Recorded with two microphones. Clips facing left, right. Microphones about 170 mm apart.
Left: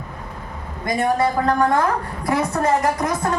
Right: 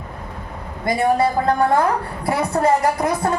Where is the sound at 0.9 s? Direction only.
30° right (ahead or behind).